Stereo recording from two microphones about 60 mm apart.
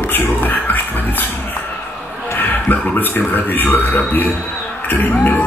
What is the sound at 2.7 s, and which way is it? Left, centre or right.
Music, left.